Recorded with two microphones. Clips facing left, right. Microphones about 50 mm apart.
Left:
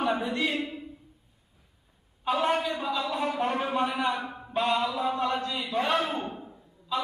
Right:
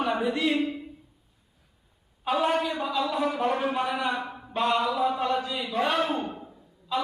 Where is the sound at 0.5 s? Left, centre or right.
Right.